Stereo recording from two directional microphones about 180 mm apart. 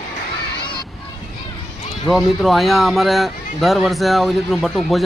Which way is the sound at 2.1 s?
Centre (ahead or behind).